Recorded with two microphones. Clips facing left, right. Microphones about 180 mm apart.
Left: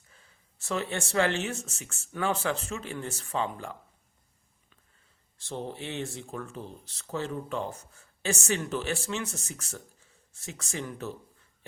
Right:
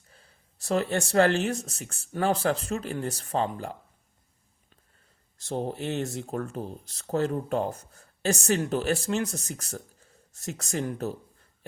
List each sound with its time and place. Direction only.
0.1 s speech: 35° right (ahead or behind)
5.4 s speech: 40° right (ahead or behind)